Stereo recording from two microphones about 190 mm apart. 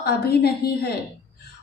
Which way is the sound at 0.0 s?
55° left (ahead or behind).